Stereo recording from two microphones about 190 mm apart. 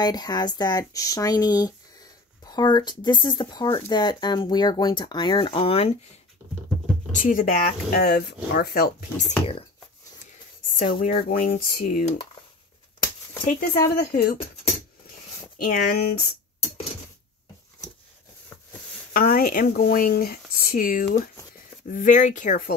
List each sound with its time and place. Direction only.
0.0 s speech: 20° left (ahead or behind)
7.2 s speech: 45° left (ahead or behind)
10.8 s speech: 45° left (ahead or behind)
13.5 s speech: 50° left (ahead or behind)
15.0 s zipper: 50° left (ahead or behind)
19.1 s speech: 50° left (ahead or behind)